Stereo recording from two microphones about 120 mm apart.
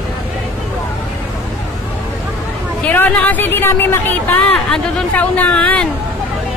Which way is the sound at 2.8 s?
15° left (ahead or behind).